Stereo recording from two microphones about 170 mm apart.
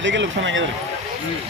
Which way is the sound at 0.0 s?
90° right.